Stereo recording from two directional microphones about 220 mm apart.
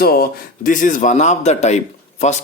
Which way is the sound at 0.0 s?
45° left (ahead or behind).